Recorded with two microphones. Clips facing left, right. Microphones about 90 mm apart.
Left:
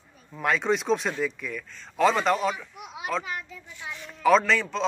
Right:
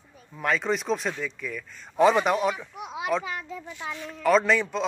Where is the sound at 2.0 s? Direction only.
15° right (ahead or behind).